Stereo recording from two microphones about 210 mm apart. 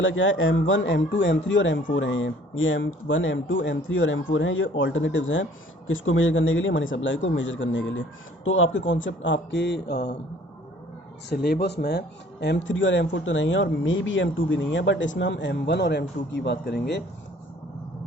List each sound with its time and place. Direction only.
0.0 s speech: 65° left (ahead or behind)
11.3 s speech: 45° left (ahead or behind)